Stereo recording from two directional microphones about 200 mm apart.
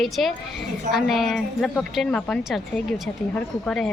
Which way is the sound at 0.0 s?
Centre (ahead or behind).